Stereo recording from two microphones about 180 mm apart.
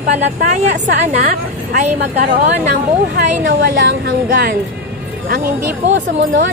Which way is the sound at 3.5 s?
75° right (ahead or behind).